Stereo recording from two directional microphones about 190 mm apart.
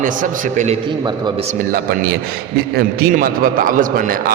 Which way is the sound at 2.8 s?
50° right (ahead or behind).